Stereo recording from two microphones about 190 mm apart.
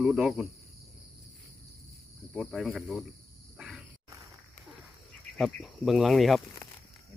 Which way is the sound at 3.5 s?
5° right (ahead or behind).